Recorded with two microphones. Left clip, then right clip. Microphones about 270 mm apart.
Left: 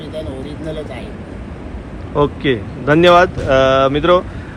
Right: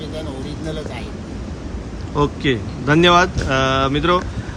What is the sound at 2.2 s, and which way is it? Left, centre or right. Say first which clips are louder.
Speech: left 3 dB; centre.